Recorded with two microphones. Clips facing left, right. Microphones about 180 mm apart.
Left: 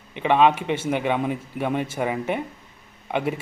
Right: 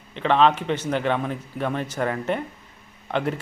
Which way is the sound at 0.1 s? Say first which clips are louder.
Left 1 dB; 15° left (ahead or behind).